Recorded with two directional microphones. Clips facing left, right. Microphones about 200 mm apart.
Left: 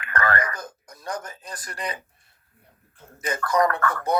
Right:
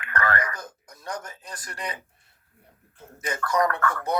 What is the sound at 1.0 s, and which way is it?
Speech, 35° left (ahead or behind).